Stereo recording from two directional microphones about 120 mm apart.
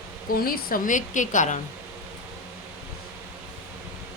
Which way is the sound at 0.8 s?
90° left.